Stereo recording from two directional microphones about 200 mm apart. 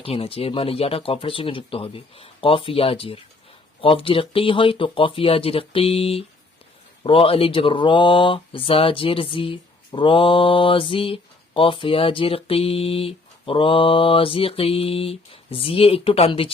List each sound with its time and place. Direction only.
0.0 s speech: 30° left (ahead or behind)